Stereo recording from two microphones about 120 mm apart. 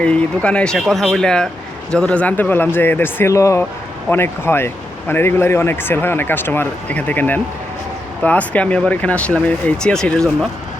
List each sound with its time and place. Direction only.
0.0 s speech: 10° left (ahead or behind)